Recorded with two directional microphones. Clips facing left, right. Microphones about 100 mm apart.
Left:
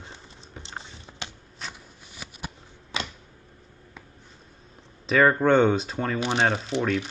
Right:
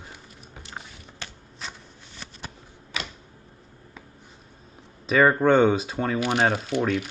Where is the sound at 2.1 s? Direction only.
10° left (ahead or behind).